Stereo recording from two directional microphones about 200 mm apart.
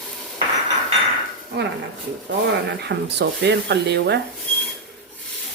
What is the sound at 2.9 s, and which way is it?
Speech, 60° right (ahead or behind).